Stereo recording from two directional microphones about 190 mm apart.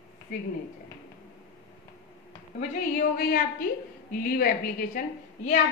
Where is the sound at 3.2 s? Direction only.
50° left (ahead or behind).